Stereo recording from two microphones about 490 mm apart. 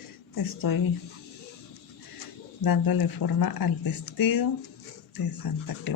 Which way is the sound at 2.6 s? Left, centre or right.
Left.